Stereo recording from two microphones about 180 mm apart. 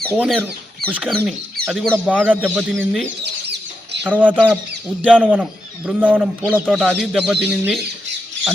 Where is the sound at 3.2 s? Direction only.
70° right (ahead or behind).